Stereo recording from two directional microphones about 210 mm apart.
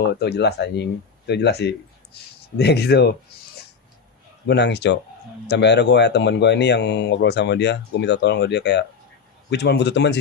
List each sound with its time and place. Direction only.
0.0 s speech: 50° left (ahead or behind)
4.4 s speech: 55° left (ahead or behind)